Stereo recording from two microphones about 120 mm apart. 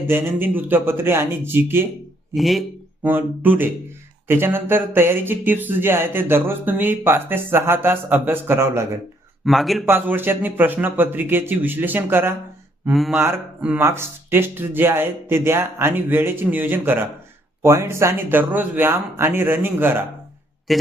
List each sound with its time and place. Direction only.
0.1 s speech: 15° right (ahead or behind)
2.3 s speech: centre (ahead or behind)
3.0 s speech: 15° right (ahead or behind)
9.4 s speech: centre (ahead or behind)
9.8 s speech: 20° right (ahead or behind)
12.9 s speech: centre (ahead or behind)
13.1 s speech: 15° right (ahead or behind)
20.7 s speech: centre (ahead or behind)